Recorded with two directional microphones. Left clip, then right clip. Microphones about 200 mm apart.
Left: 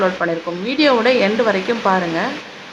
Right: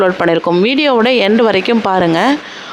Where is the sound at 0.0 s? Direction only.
50° right (ahead or behind).